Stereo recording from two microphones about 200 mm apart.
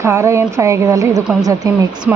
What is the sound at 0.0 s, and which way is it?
A woman's voice, 15° right (ahead or behind).